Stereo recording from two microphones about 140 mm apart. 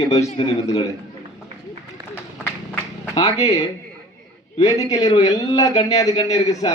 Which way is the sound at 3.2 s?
25° left (ahead or behind).